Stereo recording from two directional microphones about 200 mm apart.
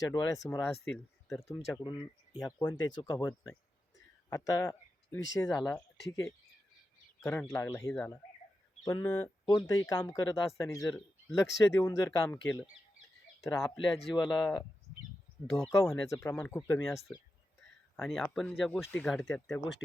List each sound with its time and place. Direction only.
0.0 s speech: 15° left (ahead or behind)
1.8 s speech: 25° left (ahead or behind)
7.2 s speech: 15° left (ahead or behind)
15.4 s speech: centre (ahead or behind)
15.7 s speech: 15° left (ahead or behind)
18.0 s speech: centre (ahead or behind)